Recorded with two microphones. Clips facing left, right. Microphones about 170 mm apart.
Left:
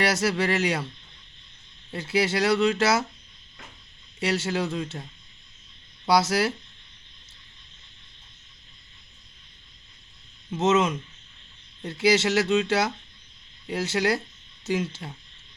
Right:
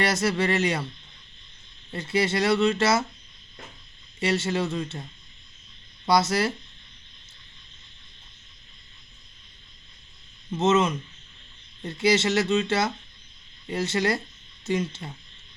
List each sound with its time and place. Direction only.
0.0 s speech: 5° left (ahead or behind)
1.9 s speech: 5° left (ahead or behind)
4.2 s speech: centre (ahead or behind)
6.1 s speech: 5° left (ahead or behind)
10.5 s speech: 5° left (ahead or behind)